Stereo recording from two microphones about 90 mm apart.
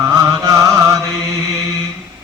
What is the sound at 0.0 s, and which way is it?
Music, 35° right (ahead or behind).